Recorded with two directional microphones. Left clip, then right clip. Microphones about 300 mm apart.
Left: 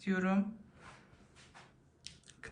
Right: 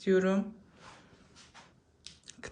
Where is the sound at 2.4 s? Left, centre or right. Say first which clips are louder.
Right 4 dB; centre.